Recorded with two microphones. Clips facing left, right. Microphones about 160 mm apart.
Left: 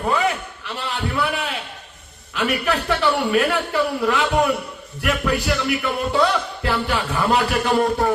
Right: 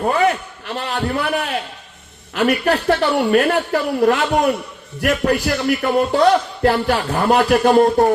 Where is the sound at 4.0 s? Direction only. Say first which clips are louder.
Right 6 dB; 50° right (ahead or behind).